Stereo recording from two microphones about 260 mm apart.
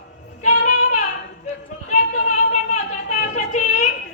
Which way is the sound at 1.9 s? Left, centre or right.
Left.